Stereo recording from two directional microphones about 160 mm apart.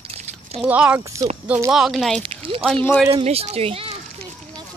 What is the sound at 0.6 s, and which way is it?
Speech, 10° right (ahead or behind).